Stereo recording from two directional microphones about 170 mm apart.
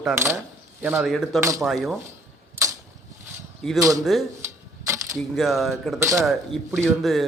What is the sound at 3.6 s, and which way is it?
Speech, centre (ahead or behind).